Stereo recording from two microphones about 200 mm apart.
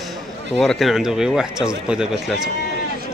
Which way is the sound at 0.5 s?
Centre (ahead or behind).